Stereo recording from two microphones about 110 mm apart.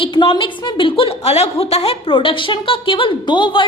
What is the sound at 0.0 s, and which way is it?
A woman's voice, 50° left (ahead or behind).